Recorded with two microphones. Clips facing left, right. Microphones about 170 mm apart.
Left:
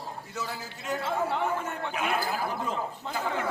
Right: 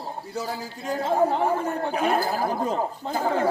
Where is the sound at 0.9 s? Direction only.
40° right (ahead or behind).